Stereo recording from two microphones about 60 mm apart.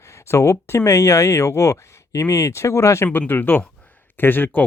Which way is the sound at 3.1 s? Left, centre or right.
Left.